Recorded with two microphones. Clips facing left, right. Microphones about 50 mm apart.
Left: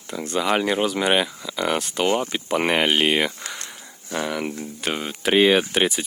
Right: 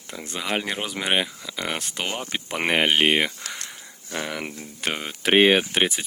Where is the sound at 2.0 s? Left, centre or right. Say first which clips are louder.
Left 12 dB; left.